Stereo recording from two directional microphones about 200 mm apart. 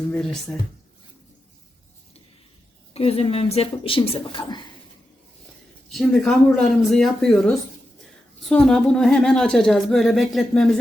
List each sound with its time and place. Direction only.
0.1 s a woman's voice: 5° left (ahead or behind)
2.9 s a woman's voice: 30° left (ahead or behind)
5.9 s a woman's voice: centre (ahead or behind)